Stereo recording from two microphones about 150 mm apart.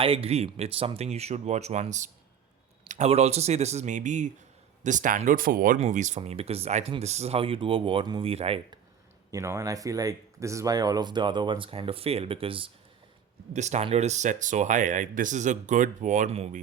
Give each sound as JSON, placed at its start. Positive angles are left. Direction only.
{"t": 0.0, "sound": "speech", "side_deg": -40}
{"t": 9.3, "sound": "speech", "side_deg": -20}
{"t": 13.5, "sound": "speech", "side_deg": -50}